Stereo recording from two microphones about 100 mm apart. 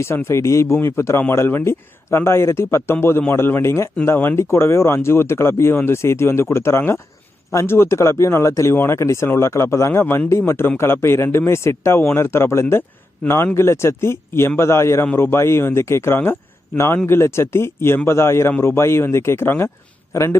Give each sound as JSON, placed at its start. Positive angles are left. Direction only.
{"t": 0.0, "sound": "speech", "side_deg": 25}